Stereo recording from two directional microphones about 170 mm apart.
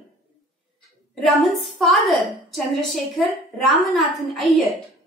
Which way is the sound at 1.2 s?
Centre (ahead or behind).